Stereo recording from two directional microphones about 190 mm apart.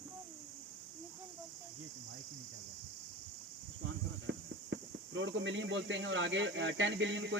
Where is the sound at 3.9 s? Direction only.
75° right (ahead or behind).